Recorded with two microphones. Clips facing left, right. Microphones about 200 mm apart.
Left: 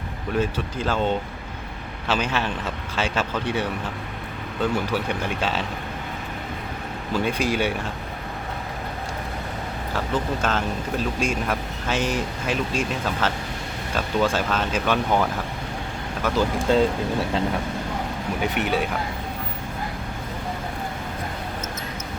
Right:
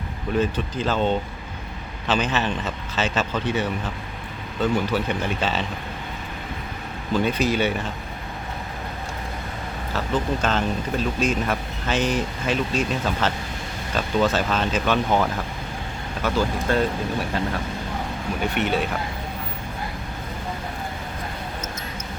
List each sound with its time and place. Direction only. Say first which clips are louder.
0.3 s speech: right 2 dB; 10° left (ahead or behind)
7.1 s speech: right 2 dB; 10° left (ahead or behind)
10.4 s speech: right 1 dB; 10° left (ahead or behind)
16.2 s speech: left 1 dB; 20° left (ahead or behind)
18.5 s speech: right 2 dB; 15° left (ahead or behind)